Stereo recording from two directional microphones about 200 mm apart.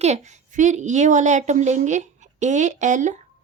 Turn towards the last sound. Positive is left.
turn(degrees=-35)  # may be behind; listen again after turning